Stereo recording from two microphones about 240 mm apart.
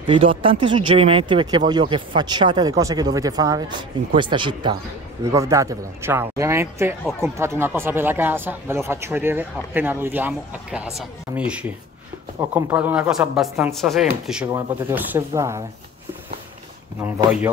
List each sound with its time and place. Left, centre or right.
0.0 s speech: right
17.0 s speech: centre